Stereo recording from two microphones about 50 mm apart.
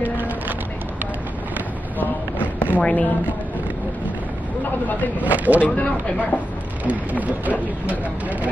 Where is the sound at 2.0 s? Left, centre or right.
Left.